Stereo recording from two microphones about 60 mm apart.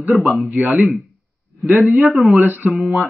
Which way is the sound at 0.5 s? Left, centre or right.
Right.